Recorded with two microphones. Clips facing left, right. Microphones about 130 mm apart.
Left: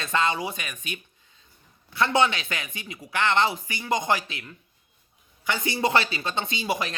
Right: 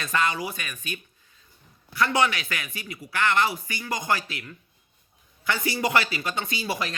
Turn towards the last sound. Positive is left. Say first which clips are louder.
# left 1 dB
turn(degrees=20)  # may be behind; listen again after turning